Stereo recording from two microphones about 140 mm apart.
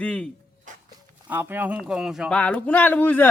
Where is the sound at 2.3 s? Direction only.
10° left (ahead or behind).